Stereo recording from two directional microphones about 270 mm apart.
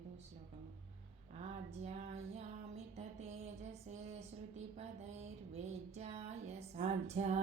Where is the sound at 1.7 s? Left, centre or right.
Right.